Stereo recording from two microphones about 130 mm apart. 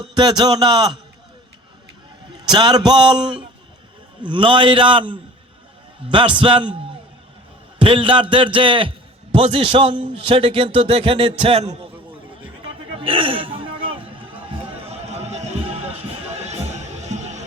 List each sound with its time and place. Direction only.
0.1 s a man's voice: 35° right (ahead or behind)
2.4 s a man's voice: 35° right (ahead or behind)
4.2 s a man's voice: 40° right (ahead or behind)
7.8 s a man's voice: 40° right (ahead or behind)
13.0 s throat clearing: 45° right (ahead or behind)
14.8 s music: 50° right (ahead or behind)